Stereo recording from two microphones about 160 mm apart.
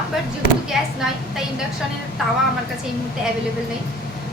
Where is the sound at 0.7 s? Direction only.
Centre (ahead or behind).